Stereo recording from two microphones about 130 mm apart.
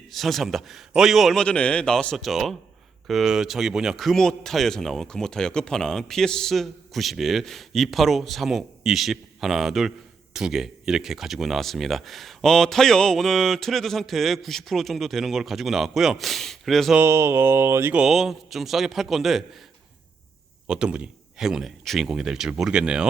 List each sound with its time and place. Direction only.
0.1 s a man's voice: centre (ahead or behind)
17.0 s mantra: 20° right (ahead or behind)
18.0 s a man's voice: centre (ahead or behind)
20.7 s a man's voice: 5° right (ahead or behind)